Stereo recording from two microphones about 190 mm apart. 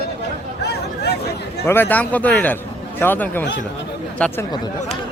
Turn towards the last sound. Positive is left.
turn(degrees=5)  # may be behind; listen again after turning